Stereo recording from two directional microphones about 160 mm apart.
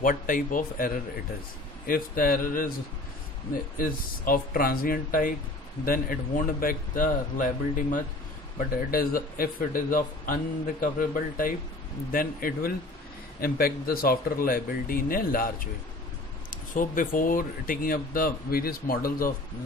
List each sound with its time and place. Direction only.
0.0 s speech: 55° left (ahead or behind)
3.7 s speech: 60° left (ahead or behind)